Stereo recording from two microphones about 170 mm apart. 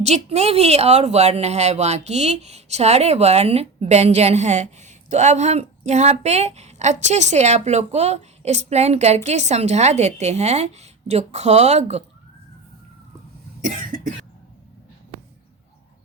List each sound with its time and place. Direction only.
0.0 s a woman's voice: 40° right (ahead or behind)
13.6 s cough: 50° right (ahead or behind)